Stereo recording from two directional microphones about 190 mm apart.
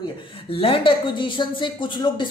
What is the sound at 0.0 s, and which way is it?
A woman's voice, 25° left (ahead or behind).